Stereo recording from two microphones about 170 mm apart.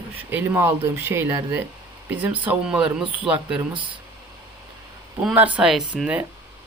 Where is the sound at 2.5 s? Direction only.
5° right (ahead or behind).